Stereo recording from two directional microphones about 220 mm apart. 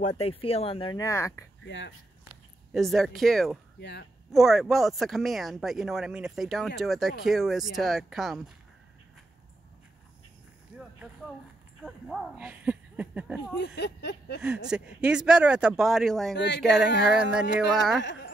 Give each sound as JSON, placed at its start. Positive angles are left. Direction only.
{"t": 0.2, "sound": "speech", "side_deg": 25}
{"t": 1.6, "sound": "speech", "side_deg": 55}
{"t": 2.7, "sound": "speech", "side_deg": 0}
{"t": 3.8, "sound": "a sound", "side_deg": 50}
{"t": 4.3, "sound": "speech", "side_deg": 0}
{"t": 10.7, "sound": "a sound", "side_deg": -5}
{"t": 11.8, "sound": "speech", "side_deg": 0}
{"t": 13.6, "sound": "a sound", "side_deg": 50}
{"t": 14.4, "sound": "speech", "side_deg": -5}
{"t": 16.3, "sound": "a sound", "side_deg": 50}
{"t": 17.2, "sound": "speech", "side_deg": -5}
{"t": 18.0, "sound": "speech", "side_deg": 55}